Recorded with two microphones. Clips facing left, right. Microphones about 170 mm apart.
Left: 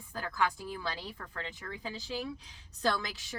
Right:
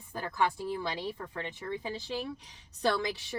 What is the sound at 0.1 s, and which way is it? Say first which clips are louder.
Speech: right 2 dB; 20° right (ahead or behind).